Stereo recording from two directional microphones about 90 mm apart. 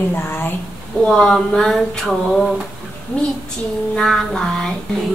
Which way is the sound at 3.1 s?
15° left (ahead or behind).